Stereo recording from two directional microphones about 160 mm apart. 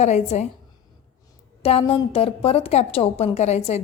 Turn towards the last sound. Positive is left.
turn(degrees=45)  # may be behind; listen again after turning